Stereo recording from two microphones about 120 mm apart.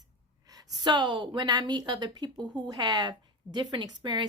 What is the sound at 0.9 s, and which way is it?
A woman's voice, 40° right (ahead or behind).